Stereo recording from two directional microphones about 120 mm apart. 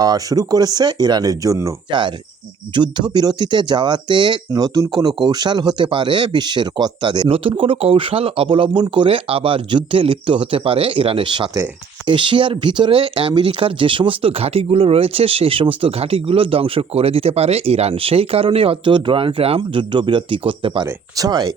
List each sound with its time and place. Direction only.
0.0 s speech: 30° right (ahead or behind)
1.9 s speech: 40° right (ahead or behind)
21.2 s speech: 35° right (ahead or behind)